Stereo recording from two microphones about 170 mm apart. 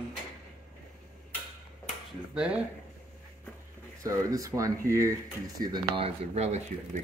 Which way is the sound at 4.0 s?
20° right (ahead or behind).